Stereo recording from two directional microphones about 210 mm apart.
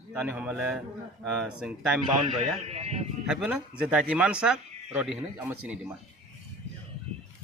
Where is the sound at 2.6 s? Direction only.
30° right (ahead or behind).